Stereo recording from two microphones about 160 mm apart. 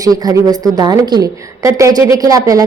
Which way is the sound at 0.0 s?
25° right (ahead or behind).